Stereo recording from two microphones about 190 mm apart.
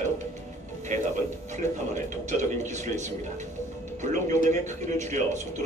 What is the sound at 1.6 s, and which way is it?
Speech, 40° right (ahead or behind).